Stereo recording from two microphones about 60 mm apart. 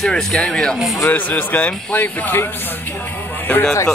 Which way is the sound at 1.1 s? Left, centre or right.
Left.